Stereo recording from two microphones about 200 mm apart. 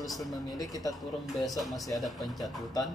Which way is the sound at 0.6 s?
15° left (ahead or behind).